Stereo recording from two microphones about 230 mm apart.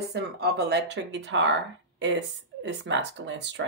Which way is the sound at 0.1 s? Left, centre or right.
Right.